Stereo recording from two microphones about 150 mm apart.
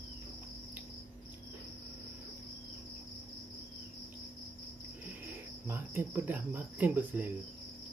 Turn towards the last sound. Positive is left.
turn(degrees=-10)  # may be behind; listen again after turning